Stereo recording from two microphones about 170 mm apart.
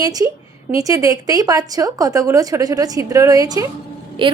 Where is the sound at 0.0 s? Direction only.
20° right (ahead or behind).